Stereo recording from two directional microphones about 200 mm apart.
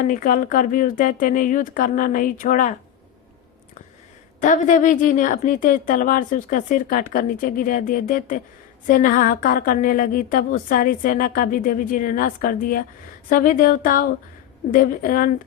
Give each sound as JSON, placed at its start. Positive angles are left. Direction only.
{"t": 0.1, "sound": "a woman's voice", "side_deg": 45}
{"t": 4.4, "sound": "a woman's voice", "side_deg": 40}